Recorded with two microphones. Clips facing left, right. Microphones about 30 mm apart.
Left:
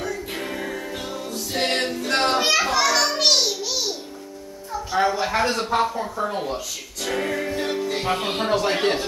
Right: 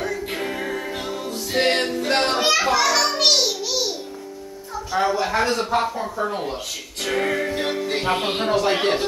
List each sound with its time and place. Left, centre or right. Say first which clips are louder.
0.1 s music: right 3 dB; centre
2.0 s child singing: right 1 dB; centre
4.9 s speech: right 1 dB; centre
7.0 s music: right 3 dB; right
8.5 s speech: right 2 dB; centre
8.7 s speech: right 1 dB; centre